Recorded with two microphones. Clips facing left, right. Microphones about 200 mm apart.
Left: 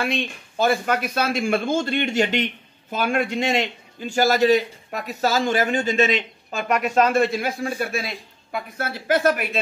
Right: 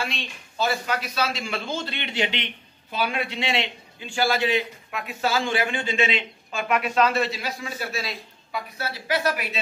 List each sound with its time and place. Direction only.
0.0 s speech: 55° left (ahead or behind)